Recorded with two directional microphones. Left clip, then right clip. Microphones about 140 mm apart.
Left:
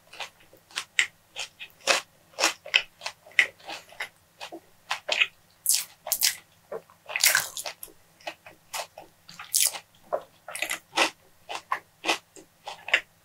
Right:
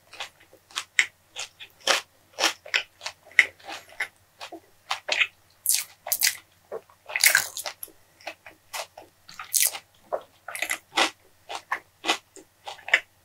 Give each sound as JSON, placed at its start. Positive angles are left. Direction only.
{"t": 0.7, "sound": "biting", "side_deg": -40}
{"t": 9.2, "sound": "biting", "side_deg": -40}
{"t": 12.6, "sound": "a sound", "side_deg": -40}